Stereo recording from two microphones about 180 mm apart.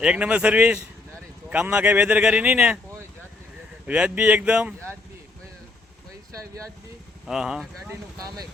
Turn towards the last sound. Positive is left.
turn(degrees=-5)  # may be behind; listen again after turning